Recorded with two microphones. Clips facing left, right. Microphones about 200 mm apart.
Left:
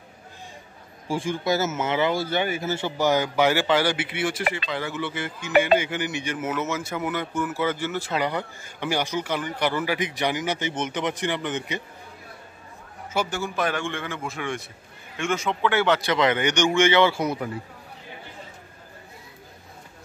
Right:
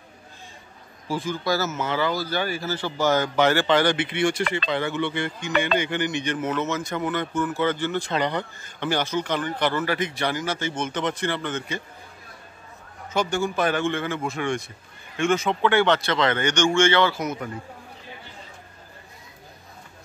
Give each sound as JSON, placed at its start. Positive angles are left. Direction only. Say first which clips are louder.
{"t": 1.0, "sound": "speech", "louder": "left 1 dB", "side_deg": 25}
{"t": 13.1, "sound": "a man's voice", "louder": "right 3 dB", "side_deg": 5}